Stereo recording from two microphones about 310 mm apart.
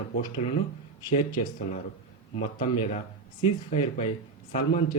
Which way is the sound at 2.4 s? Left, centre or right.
Left.